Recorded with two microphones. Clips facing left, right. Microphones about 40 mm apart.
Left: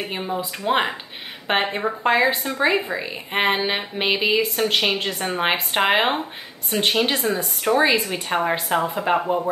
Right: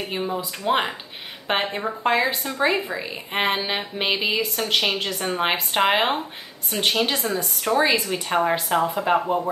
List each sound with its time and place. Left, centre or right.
0.0 s a woman's voice: centre